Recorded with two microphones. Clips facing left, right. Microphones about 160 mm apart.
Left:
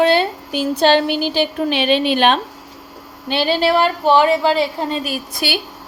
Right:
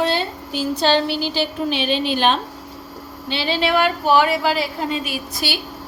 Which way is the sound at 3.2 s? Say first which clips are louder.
Left 5 dB; 50° left (ahead or behind).